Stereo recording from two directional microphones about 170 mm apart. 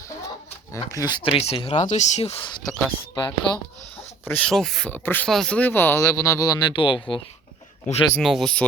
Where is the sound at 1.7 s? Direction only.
45° left (ahead or behind); by 2.7 s 25° left (ahead or behind).